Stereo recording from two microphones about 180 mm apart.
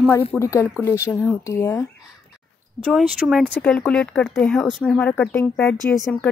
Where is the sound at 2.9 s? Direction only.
Centre (ahead or behind).